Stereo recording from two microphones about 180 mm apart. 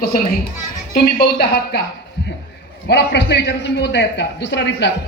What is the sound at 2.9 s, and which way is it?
A man's voice, 65° left (ahead or behind).